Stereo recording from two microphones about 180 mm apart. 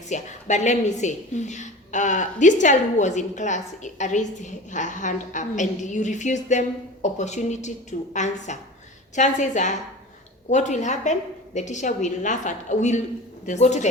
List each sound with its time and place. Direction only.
0.1 s a woman's voice: 40° left (ahead or behind)